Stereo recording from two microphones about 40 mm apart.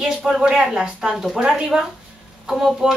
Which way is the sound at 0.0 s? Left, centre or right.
Centre.